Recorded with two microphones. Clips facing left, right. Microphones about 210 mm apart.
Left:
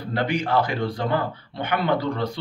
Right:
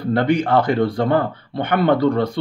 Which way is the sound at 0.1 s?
55° right (ahead or behind).